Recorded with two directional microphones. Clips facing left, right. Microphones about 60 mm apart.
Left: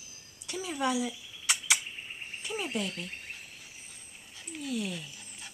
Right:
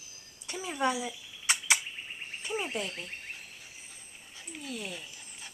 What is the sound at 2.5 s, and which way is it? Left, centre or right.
Frog, centre.